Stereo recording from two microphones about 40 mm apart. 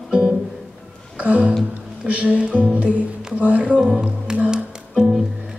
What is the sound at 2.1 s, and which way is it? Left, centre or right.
Speech, right.